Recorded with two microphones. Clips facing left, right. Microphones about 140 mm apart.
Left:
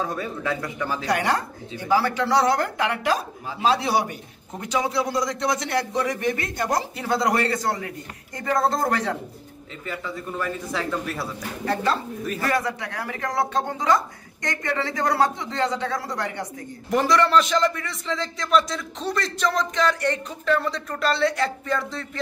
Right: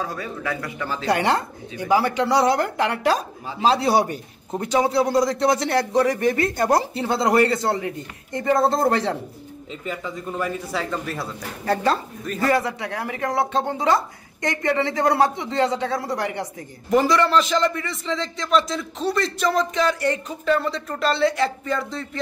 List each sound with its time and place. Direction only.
0.0 s speech: 20° left (ahead or behind)
0.7 s speech: 10° left (ahead or behind)
1.0 s speech: 25° right (ahead or behind)
1.8 s speech: 15° right (ahead or behind)
2.8 s a man's voice: 35° right (ahead or behind)
9.8 s speech: 15° right (ahead or behind)
10.7 s a man's voice: centre (ahead or behind)
11.6 s a man's voice: 40° right (ahead or behind)
12.4 s speech: 25° right (ahead or behind)
16.9 s a man's voice: centre (ahead or behind)